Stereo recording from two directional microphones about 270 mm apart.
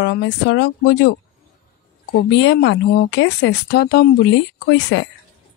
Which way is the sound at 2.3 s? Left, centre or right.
Left.